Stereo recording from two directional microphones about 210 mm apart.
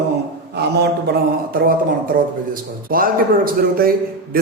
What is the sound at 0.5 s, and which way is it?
Speech, 50° right (ahead or behind).